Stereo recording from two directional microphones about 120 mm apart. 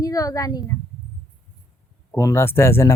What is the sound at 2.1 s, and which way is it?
Speech, 20° left (ahead or behind).